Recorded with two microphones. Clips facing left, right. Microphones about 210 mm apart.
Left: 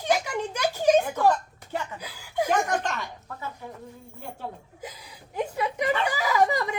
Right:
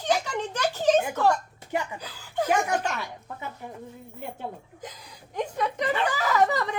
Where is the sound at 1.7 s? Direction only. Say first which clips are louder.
Right 2 dB; 15° right (ahead or behind).